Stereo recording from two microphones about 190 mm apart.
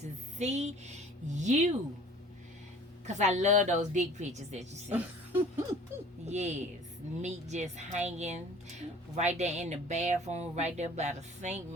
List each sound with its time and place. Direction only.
0.0 s speech: 35° right (ahead or behind)
3.1 s speech: 40° right (ahead or behind)
4.9 s a sound: 10° right (ahead or behind)
6.2 s speech: 35° right (ahead or behind)